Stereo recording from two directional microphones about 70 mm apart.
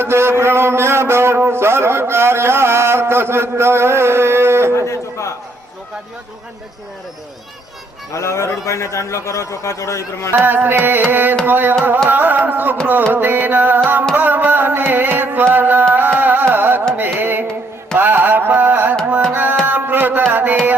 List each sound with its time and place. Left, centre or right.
0.0 s a sound: right
4.9 s a sound: left
8.1 s a man's voice: left
10.3 s carnatic music: right
14.2 s music: right
17.0 s carnatic music: right
19.3 s tabla: right
19.6 s music: right